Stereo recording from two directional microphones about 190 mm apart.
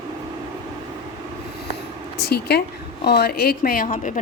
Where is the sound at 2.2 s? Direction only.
60° left (ahead or behind).